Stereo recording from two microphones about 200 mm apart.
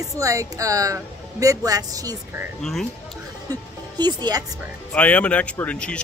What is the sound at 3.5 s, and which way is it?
Speech, 20° right (ahead or behind).